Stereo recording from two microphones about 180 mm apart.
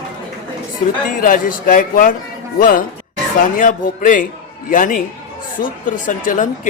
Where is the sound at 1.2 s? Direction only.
50° left (ahead or behind).